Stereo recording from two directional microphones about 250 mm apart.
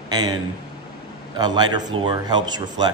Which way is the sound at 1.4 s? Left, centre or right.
Centre.